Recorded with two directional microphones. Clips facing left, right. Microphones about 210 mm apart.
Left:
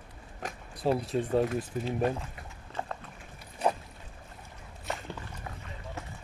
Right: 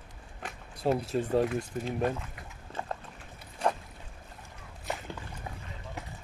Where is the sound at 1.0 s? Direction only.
Centre (ahead or behind).